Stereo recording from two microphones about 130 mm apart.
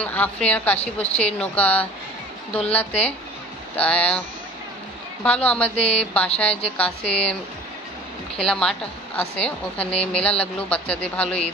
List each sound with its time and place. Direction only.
0.0 s a woman's voice: 10° left (ahead or behind)
5.2 s a woman's voice: 10° left (ahead or behind)
5.8 s speech: 50° left (ahead or behind)
6.1 s a woman's voice: 10° left (ahead or behind)
8.5 s a woman's voice: 5° left (ahead or behind)